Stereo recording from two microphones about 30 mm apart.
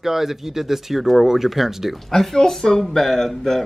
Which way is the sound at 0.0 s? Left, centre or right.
Centre.